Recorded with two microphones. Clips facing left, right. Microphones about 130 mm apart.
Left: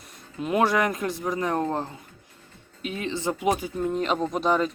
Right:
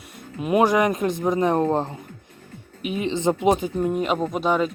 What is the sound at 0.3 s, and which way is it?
Speech, 15° right (ahead or behind).